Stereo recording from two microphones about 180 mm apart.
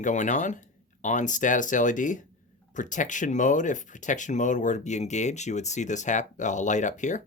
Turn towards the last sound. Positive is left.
turn(degrees=45)  # may be behind; listen again after turning